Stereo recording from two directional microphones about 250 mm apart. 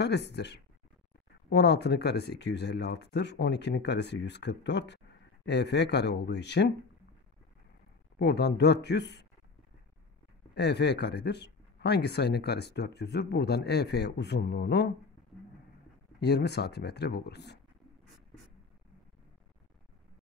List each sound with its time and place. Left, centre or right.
0.0 s speech: left
8.2 s speech: left
10.5 s speech: left
16.2 s speech: left